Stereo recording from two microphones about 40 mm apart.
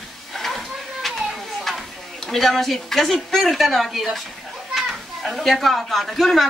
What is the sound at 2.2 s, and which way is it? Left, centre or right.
Speech, centre.